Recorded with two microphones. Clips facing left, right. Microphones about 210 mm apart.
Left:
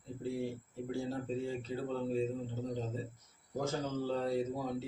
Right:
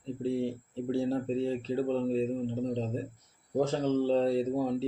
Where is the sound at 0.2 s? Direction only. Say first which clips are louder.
Right 6 dB; 30° right (ahead or behind).